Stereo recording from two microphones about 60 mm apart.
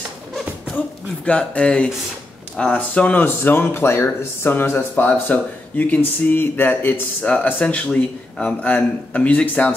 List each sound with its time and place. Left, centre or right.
1.2 s speech: centre; by 7.0 s left
7.4 s speech: left